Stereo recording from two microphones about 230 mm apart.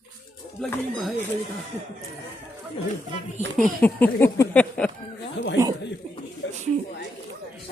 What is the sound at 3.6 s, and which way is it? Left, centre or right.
Speech, centre.